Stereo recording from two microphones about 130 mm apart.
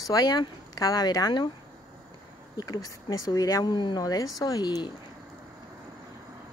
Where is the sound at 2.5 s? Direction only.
30° left (ahead or behind).